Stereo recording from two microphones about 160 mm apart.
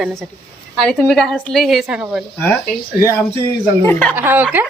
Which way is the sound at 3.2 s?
15° left (ahead or behind).